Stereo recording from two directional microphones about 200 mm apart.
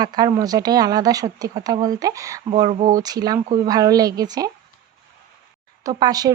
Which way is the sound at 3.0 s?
20° right (ahead or behind).